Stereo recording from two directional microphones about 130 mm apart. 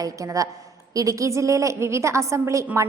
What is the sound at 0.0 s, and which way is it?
A woman's voice, 25° right (ahead or behind).